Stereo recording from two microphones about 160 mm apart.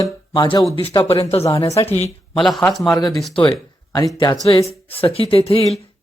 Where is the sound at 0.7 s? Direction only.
35° left (ahead or behind).